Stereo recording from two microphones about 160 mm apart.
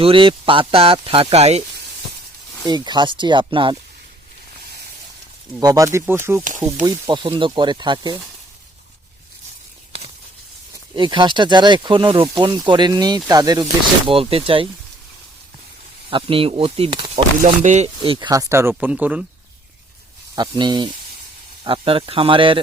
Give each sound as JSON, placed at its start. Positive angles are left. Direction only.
{"t": 0.0, "sound": "speech", "side_deg": -35}
{"t": 2.6, "sound": "speech", "side_deg": -25}
{"t": 5.5, "sound": "speech", "side_deg": -20}
{"t": 6.8, "sound": "speech", "side_deg": -25}
{"t": 10.9, "sound": "speech", "side_deg": -30}
{"t": 14.1, "sound": "speech", "side_deg": -35}
{"t": 16.0, "sound": "speech", "side_deg": -35}
{"t": 17.4, "sound": "speech", "side_deg": -50}
{"t": 18.3, "sound": "speech", "side_deg": -20}
{"t": 20.3, "sound": "speech", "side_deg": -30}